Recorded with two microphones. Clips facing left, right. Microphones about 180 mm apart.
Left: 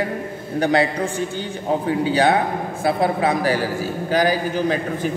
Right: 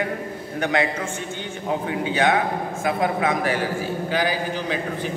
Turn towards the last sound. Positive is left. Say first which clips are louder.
# left 5 dB
turn(degrees=45)  # may be behind; listen again after turning